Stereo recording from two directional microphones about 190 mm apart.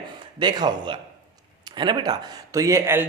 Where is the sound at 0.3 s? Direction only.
25° right (ahead or behind).